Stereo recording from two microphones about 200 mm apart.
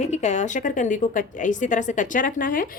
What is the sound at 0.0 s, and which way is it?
A woman's voice, 35° left (ahead or behind).